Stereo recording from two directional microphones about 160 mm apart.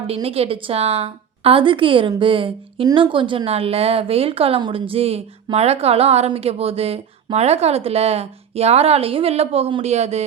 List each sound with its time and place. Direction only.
0.1 s a woman's voice: 35° right (ahead or behind)